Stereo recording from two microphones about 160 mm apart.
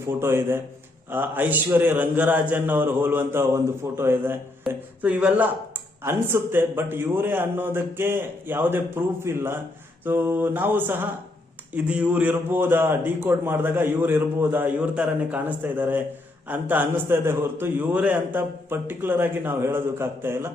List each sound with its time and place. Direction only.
0.0 s a man's voice: 15° right (ahead or behind)